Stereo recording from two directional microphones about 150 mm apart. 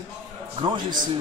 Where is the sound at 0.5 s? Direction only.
35° right (ahead or behind).